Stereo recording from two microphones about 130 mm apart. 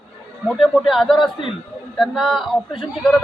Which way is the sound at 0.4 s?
Centre (ahead or behind).